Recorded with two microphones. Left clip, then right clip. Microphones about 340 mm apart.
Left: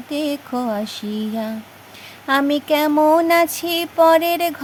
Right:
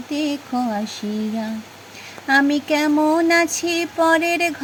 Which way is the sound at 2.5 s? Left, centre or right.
Left.